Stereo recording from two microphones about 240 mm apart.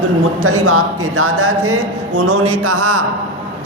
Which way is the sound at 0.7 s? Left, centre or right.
Right.